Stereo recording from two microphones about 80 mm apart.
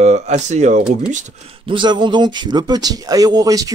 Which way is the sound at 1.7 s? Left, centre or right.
Right.